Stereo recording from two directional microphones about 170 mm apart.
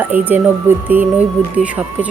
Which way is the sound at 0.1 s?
10° right (ahead or behind).